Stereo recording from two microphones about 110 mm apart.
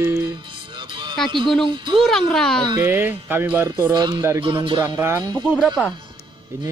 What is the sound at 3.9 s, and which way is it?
Speech, 40° right (ahead or behind).